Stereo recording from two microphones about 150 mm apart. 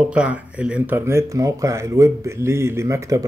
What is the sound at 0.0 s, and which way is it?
Speech, 10° right (ahead or behind).